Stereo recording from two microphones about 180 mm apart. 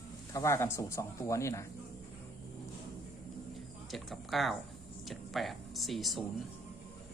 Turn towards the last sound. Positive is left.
turn(degrees=0)  # may be behind; listen again after turning